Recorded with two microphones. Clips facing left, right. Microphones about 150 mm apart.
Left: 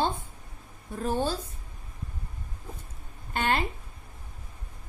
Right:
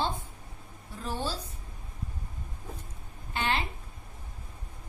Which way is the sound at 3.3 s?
50° left (ahead or behind).